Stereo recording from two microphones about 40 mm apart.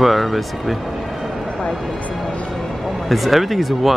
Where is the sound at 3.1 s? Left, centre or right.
Centre.